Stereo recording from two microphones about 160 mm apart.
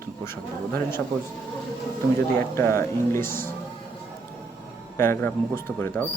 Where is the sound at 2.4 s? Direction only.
15° left (ahead or behind).